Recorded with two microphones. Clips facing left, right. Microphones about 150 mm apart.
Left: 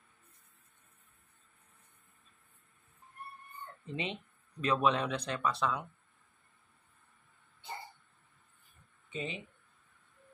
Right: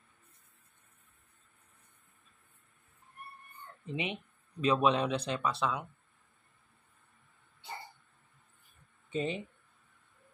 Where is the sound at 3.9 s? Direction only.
15° right (ahead or behind).